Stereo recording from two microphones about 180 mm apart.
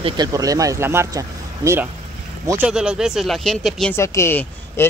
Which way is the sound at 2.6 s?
5° right (ahead or behind).